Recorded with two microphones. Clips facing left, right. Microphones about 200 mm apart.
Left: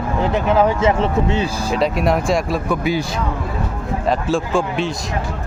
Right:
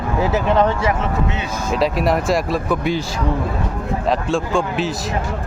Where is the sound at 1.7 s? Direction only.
Centre (ahead or behind).